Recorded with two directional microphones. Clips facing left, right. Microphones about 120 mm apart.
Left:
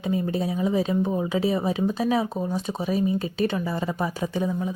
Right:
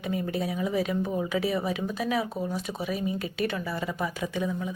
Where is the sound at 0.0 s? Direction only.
25° left (ahead or behind).